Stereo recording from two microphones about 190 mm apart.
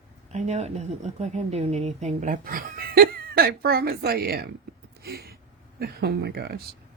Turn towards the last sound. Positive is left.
turn(degrees=-55)  # may be behind; listen again after turning